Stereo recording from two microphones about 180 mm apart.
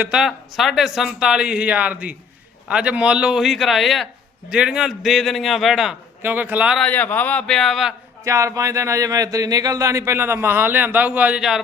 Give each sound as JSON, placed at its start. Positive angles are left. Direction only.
{"t": 0.0, "sound": "a man's voice", "side_deg": -5}
{"t": 6.8, "sound": "a man's voice", "side_deg": 10}
{"t": 8.2, "sound": "speech", "side_deg": -15}